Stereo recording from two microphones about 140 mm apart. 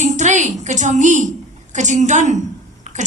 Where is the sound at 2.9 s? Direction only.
60° right (ahead or behind).